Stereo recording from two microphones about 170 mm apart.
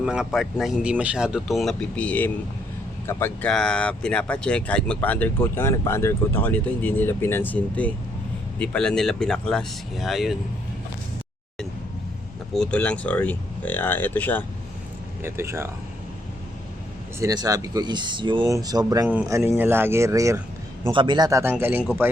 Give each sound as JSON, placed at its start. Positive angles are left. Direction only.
{"t": 0.0, "sound": "speech", "side_deg": -5}
{"t": 12.5, "sound": "speech", "side_deg": 5}
{"t": 15.2, "sound": "speech", "side_deg": -15}
{"t": 17.2, "sound": "speech", "side_deg": -20}
{"t": 19.0, "sound": "speech", "side_deg": -10}
{"t": 20.9, "sound": "speech", "side_deg": -30}